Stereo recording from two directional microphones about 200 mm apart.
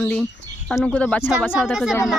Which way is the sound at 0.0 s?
5° left (ahead or behind).